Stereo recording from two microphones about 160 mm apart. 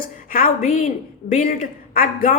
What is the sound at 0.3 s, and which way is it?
A woman's voice, 60° left (ahead or behind).